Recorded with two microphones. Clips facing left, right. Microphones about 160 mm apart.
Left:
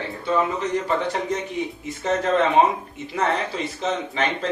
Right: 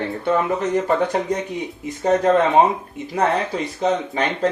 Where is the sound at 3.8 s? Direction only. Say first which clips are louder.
Right 4 dB; 40° right (ahead or behind).